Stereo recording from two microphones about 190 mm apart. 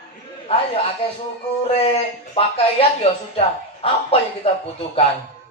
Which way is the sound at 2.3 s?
30° left (ahead or behind).